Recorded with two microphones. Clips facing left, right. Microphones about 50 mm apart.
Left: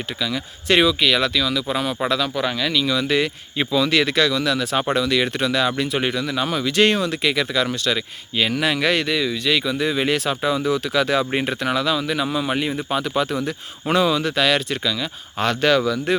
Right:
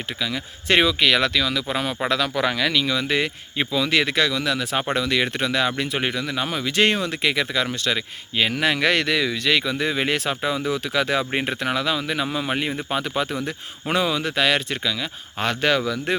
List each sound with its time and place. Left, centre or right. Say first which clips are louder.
0.2 s speech: left 2 dB; right
0.9 s speech: even; right
2.0 s speech: even; right
2.3 s speech: even; right
2.8 s speech: left 2 dB; right
3.6 s speech: left 2 dB; centre